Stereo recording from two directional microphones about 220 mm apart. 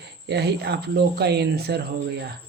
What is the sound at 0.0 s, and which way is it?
Speech, 50° right (ahead or behind).